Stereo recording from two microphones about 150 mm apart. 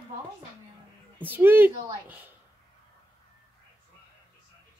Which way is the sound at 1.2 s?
15° right (ahead or behind).